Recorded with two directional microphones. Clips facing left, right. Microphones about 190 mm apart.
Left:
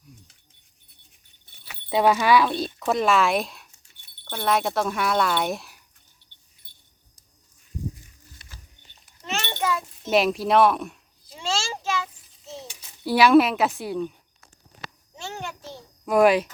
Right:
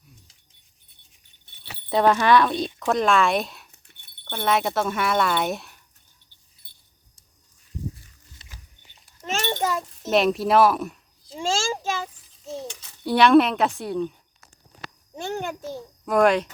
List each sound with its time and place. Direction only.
1.9 s speech: 5° left (ahead or behind)
3.7 s dog: 60° right (ahead or behind)
4.3 s speech: centre (ahead or behind)
6.6 s a sound: 30° right (ahead or behind)
9.2 s children playing: 45° right (ahead or behind)
10.1 s speech: centre (ahead or behind)
11.3 s a sound: 45° right (ahead or behind)
13.1 s speech: 5° left (ahead or behind)
15.1 s a sound: 55° right (ahead or behind)
16.0 s speech: 5° left (ahead or behind)